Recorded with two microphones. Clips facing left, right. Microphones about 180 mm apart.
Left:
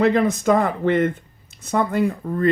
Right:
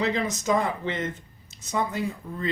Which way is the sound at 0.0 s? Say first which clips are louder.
Left 9 dB; 55° left (ahead or behind).